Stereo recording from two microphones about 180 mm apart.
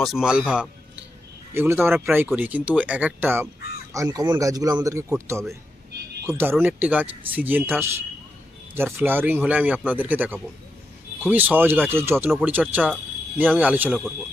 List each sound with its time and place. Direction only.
0.0 s speech: centre (ahead or behind)